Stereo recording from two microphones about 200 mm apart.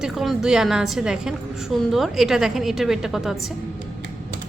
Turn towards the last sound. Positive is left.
turn(degrees=0)  # may be behind; listen again after turning